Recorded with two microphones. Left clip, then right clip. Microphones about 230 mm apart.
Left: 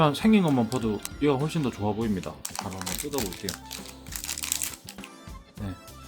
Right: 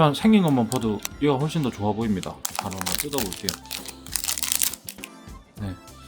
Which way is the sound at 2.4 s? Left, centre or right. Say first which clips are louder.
Right 5 dB; right.